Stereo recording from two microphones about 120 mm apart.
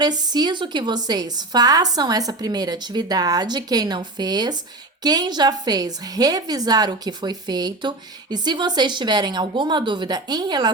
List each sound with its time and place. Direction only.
0.0 s a woman's voice: 35° right (ahead or behind)